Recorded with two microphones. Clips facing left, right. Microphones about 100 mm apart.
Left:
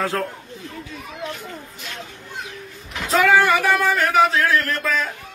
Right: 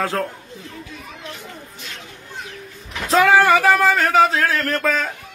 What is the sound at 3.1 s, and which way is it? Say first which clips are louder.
A man's voice: right 2 dB; 30° right (ahead or behind).